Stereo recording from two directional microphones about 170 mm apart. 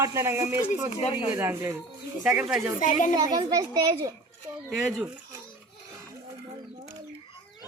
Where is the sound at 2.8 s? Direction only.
50° left (ahead or behind).